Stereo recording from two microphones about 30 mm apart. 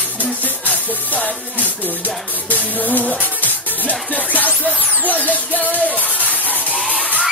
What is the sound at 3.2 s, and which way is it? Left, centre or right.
Music, left.